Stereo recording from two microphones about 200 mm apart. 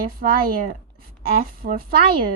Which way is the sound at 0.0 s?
45° right (ahead or behind).